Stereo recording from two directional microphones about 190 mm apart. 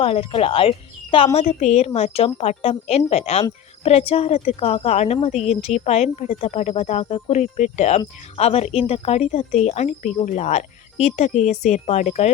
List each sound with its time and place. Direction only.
0.0 s speech: 30° left (ahead or behind)